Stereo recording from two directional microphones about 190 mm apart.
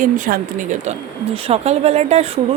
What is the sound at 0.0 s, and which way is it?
Speech, 40° right (ahead or behind).